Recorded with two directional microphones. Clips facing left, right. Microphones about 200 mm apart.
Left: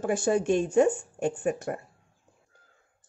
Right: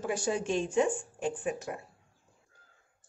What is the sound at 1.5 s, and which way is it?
Speech, 55° left (ahead or behind).